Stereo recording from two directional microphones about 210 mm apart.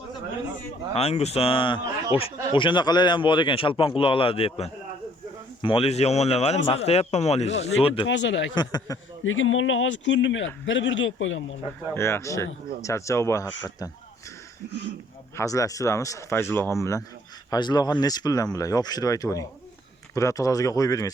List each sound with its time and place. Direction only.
0.9 s speech: 30° left (ahead or behind)
8.0 s speech: 60° left (ahead or behind)
8.5 s speech: 20° left (ahead or behind)
9.2 s speech: 70° left (ahead or behind)
11.9 s speech: 10° left (ahead or behind)
15.4 s speech: 15° left (ahead or behind)